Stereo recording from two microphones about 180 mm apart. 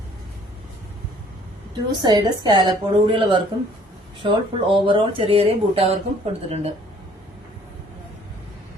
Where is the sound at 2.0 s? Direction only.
20° right (ahead or behind).